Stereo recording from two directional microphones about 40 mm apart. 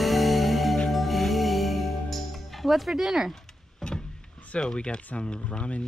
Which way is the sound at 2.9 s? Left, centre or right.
Centre.